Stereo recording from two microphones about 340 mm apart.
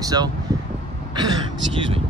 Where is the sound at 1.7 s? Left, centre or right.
Centre.